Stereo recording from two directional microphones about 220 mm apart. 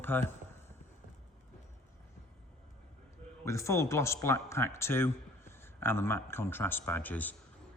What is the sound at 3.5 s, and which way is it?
Speech, 15° left (ahead or behind).